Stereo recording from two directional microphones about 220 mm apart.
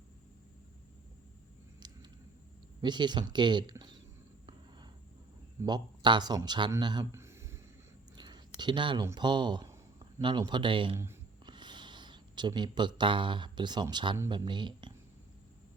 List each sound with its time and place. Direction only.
2.8 s speech: 20° right (ahead or behind)
5.5 s speech: 20° right (ahead or behind)
10.9 s speech: 10° right (ahead or behind)